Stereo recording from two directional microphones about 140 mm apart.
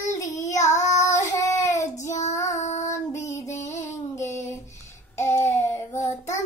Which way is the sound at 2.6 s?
55° left (ahead or behind).